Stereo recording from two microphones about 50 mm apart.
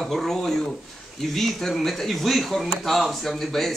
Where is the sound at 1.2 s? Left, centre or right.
Centre.